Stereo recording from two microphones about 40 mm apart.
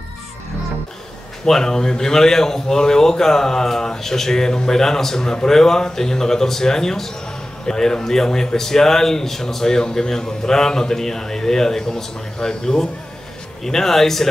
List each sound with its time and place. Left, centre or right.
1.4 s a man's voice: centre